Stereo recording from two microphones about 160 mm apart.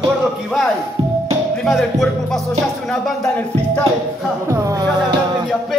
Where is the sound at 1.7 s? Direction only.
Centre (ahead or behind).